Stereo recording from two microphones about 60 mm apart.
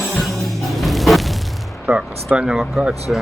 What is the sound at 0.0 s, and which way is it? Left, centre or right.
Music, centre.